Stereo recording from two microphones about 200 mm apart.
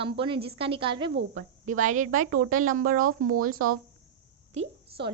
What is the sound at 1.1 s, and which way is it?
Speech, 65° right (ahead or behind).